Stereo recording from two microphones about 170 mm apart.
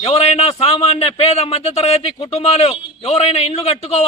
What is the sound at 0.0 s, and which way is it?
Speech, 35° left (ahead or behind).